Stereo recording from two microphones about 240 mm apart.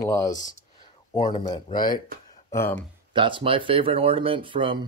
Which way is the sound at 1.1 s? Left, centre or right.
Centre.